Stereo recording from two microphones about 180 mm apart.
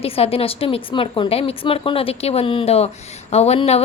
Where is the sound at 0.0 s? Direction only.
35° left (ahead or behind).